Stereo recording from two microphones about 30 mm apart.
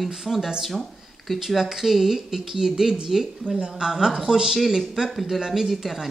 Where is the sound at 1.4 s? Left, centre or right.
Centre.